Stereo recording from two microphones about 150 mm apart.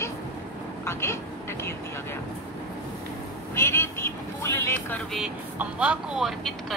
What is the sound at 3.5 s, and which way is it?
Speech, 15° left (ahead or behind).